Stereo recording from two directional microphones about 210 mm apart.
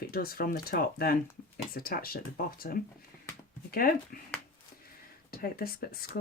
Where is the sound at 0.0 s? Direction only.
45° left (ahead or behind).